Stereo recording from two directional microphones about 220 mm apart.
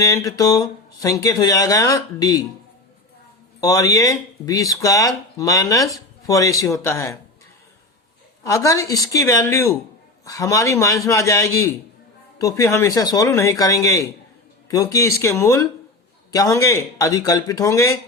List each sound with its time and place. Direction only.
0.0 s speech: 15° left (ahead or behind)
3.6 s speech: 15° left (ahead or behind)
8.4 s speech: 15° left (ahead or behind)